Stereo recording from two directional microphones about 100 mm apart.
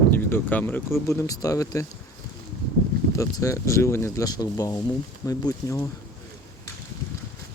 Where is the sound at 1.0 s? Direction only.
35° left (ahead or behind).